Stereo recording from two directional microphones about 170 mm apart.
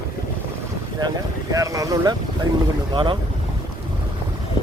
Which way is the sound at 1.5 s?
20° right (ahead or behind).